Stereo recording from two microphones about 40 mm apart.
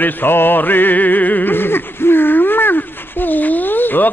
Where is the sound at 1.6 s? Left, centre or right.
Left.